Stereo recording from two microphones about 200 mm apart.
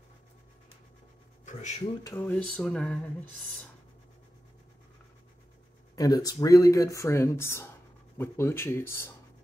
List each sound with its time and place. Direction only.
1.4 s a sound: 40° left (ahead or behind)
2.0 s speech: 10° left (ahead or behind)
5.9 s speech: 20° left (ahead or behind)